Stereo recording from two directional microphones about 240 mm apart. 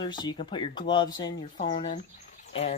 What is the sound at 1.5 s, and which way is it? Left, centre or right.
Speech, left.